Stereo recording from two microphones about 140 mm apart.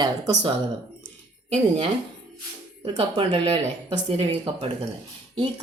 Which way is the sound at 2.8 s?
40° right (ahead or behind).